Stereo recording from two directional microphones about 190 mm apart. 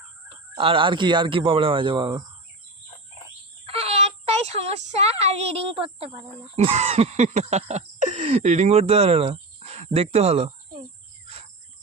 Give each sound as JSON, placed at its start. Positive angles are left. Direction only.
{"t": 0.6, "sound": "speech", "side_deg": -25}
{"t": 3.7, "sound": "speech", "side_deg": -30}